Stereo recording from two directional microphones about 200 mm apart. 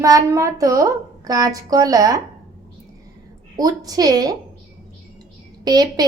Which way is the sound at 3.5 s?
20° right (ahead or behind).